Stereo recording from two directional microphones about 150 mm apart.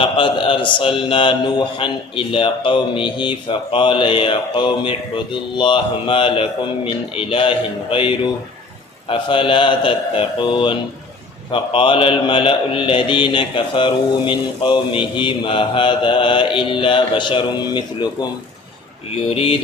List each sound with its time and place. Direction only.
0.0 s a man's voice: 35° left (ahead or behind)
19.3 s a man's voice: 40° left (ahead or behind)